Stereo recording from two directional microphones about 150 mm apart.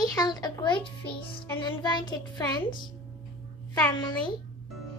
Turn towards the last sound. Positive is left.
turn(degrees=30)  # may be behind; listen again after turning